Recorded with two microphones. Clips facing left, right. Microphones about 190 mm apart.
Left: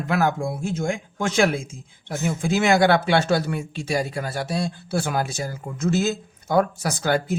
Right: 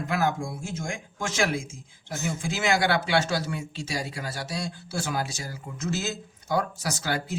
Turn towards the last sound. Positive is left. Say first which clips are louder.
# left 7 dB
turn(degrees=55)  # may be behind; listen again after turning